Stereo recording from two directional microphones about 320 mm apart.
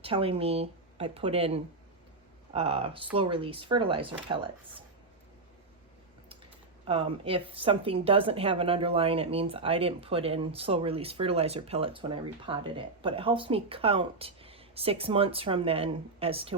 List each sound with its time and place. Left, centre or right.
0.0 s a woman's voice: centre
6.8 s a woman's voice: centre